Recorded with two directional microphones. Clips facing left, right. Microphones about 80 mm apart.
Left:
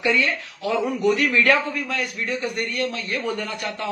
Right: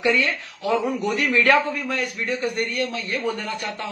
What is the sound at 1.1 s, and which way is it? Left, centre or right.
A man's voice, right.